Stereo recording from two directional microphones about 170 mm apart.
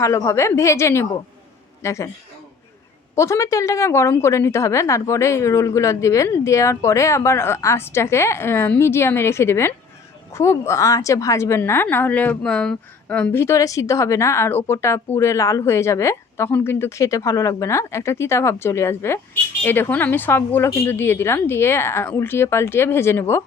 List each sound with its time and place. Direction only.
0.0 s a woman's voice: 15° left (ahead or behind)
3.2 s a woman's voice: 15° left (ahead or behind)